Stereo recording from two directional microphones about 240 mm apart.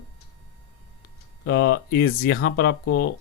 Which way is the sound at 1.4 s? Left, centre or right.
Left.